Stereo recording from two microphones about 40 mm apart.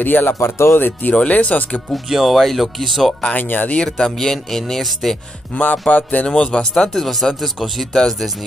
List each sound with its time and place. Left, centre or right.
0.0 s speech: left
1.1 s speech: left
2.0 s speech: centre
3.3 s speech: left
3.6 s speech: left
4.0 s speech: centre
5.6 s speech: left
6.2 s speech: left; by 7.7 s centre